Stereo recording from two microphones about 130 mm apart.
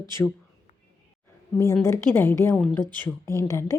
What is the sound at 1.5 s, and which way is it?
A woman's voice, 25° left (ahead or behind).